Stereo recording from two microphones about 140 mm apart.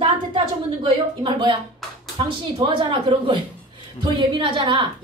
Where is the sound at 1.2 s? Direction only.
35° right (ahead or behind).